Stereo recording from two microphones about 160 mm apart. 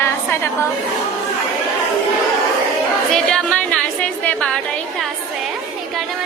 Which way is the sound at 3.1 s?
5° left (ahead or behind).